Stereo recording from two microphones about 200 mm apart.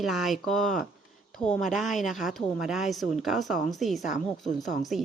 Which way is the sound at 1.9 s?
Centre (ahead or behind).